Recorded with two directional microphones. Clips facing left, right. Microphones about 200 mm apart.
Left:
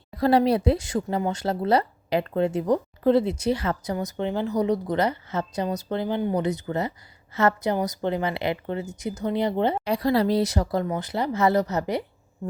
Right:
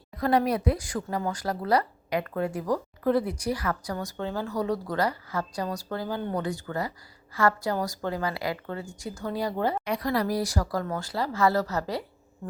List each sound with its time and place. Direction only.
0.2 s speech: 30° left (ahead or behind)